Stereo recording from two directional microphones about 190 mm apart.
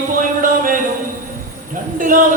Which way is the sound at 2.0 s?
45° right (ahead or behind).